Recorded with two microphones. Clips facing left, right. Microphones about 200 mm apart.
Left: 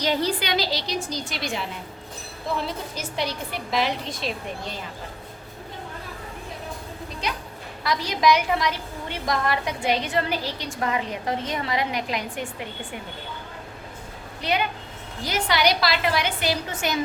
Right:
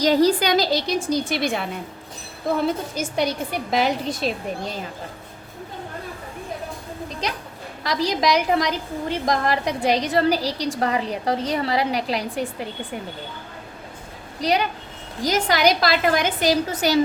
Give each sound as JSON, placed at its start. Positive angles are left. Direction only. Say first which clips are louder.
{"t": 0.0, "sound": "a woman's voice", "louder": "right 7 dB", "side_deg": -40}
{"t": 7.9, "sound": "a woman's voice", "louder": "even", "side_deg": -40}
{"t": 14.4, "sound": "a woman's voice", "louder": "right 4 dB", "side_deg": -40}